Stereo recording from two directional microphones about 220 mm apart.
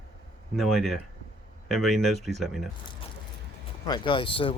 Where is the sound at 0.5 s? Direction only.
Centre (ahead or behind).